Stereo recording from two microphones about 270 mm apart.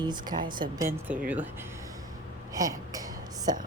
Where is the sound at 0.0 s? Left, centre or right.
Centre.